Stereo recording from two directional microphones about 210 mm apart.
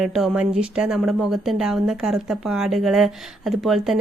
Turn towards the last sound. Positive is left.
turn(degrees=0)  # may be behind; listen again after turning